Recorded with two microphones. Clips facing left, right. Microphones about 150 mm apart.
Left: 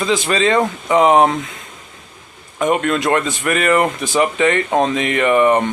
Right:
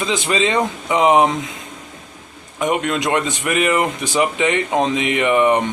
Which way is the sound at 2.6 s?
15° right (ahead or behind).